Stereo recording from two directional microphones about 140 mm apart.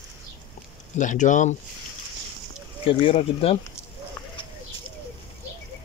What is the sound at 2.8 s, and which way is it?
Speech, 40° left (ahead or behind).